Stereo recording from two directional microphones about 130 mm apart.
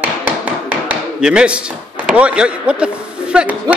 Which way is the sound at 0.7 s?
10° right (ahead or behind).